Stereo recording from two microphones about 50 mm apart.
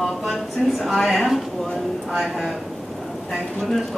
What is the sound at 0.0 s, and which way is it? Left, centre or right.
Speech, centre.